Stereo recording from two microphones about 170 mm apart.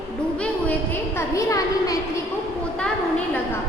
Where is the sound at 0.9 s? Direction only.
15° left (ahead or behind).